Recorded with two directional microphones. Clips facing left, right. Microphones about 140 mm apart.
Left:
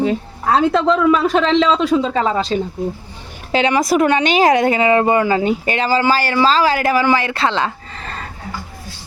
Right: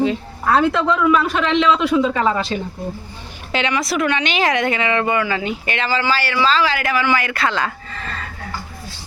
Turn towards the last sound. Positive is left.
turn(degrees=25)  # may be behind; listen again after turning